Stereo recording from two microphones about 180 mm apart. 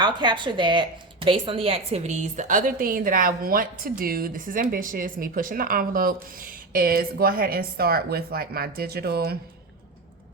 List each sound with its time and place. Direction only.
0.0 s a woman's voice: 25° right (ahead or behind); by 9.4 s 60° right (ahead or behind)